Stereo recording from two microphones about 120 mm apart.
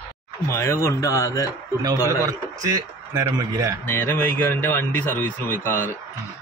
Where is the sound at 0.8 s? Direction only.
25° left (ahead or behind).